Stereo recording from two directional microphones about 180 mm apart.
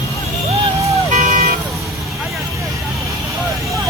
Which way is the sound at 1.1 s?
45° right (ahead or behind).